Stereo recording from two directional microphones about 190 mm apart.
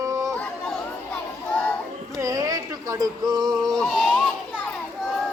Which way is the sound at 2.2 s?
20° right (ahead or behind).